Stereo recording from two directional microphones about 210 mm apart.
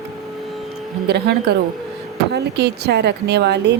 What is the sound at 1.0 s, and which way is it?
A woman's voice, 50° right (ahead or behind).